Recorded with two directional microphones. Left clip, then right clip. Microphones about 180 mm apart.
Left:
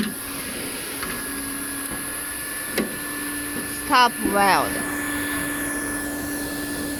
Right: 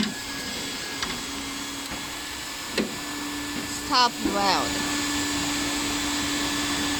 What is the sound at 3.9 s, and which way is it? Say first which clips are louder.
Speech: left 4 dB; 20° left (ahead or behind).